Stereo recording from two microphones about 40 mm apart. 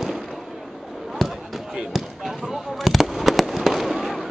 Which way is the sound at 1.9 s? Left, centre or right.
Centre.